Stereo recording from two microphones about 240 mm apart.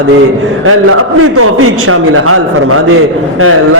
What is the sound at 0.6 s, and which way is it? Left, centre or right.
A man's voice, right.